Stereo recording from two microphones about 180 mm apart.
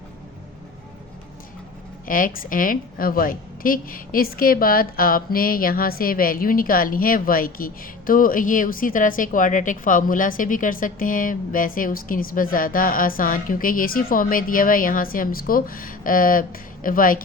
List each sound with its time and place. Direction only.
2.0 s a woman's voice: 50° left (ahead or behind)